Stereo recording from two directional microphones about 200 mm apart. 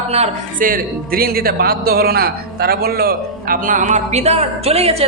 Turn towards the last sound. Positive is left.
turn(degrees=-30)  # may be behind; listen again after turning